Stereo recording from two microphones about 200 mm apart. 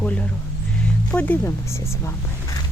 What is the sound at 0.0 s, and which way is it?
Music, 5° left (ahead or behind).